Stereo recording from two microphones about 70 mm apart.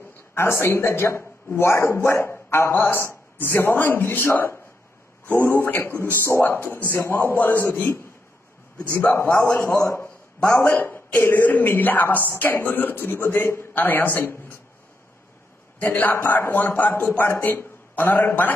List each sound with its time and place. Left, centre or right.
0.3 s a man's voice: left
9.0 s a man's voice: left
10.5 s a woman's voice: left
15.8 s a woman's voice: left